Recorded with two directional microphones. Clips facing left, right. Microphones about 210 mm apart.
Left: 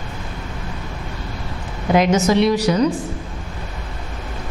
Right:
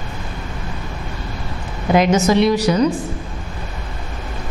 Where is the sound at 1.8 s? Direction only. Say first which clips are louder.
Right 1 dB; 15° right (ahead or behind).